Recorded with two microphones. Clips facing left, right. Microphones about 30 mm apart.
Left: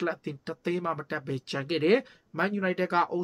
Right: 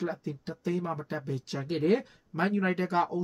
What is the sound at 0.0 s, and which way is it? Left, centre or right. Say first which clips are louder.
Speech: left 3 dB; left.